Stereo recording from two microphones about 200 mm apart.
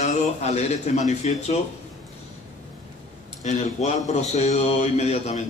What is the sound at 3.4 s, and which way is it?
A man's voice, 35° left (ahead or behind).